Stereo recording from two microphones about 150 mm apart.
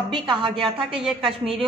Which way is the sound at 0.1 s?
30° right (ahead or behind).